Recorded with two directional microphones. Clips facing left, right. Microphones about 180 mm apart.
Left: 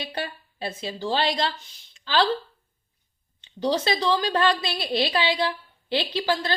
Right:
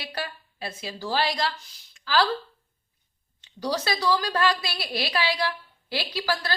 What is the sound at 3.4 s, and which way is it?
A woman's voice, 25° left (ahead or behind).